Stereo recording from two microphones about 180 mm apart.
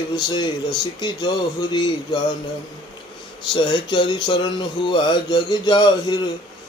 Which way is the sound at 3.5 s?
25° left (ahead or behind).